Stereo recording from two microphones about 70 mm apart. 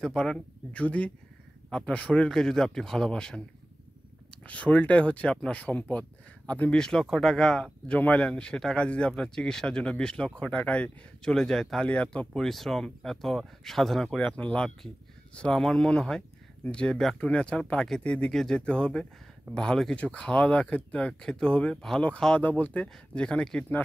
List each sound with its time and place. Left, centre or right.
0.0 s speech: centre
0.7 s speech: centre
6.8 s speech: centre
11.3 s speech: centre
14.1 s speech: centre
18.3 s speech: centre
21.1 s speech: centre